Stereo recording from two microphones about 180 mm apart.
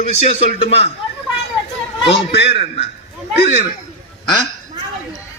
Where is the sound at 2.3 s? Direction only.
75° left (ahead or behind).